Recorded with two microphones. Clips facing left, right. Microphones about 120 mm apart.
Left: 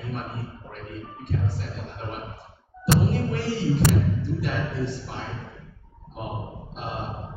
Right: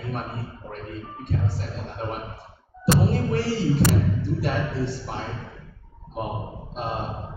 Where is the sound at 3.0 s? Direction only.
35° right (ahead or behind).